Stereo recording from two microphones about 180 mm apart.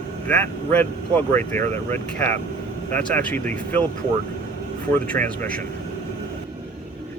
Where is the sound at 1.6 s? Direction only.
40° right (ahead or behind).